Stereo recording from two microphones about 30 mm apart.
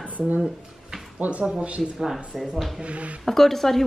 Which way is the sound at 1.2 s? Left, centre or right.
Right.